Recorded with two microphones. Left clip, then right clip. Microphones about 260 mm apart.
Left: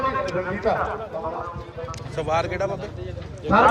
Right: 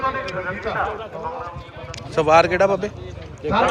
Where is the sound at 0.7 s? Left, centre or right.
Left.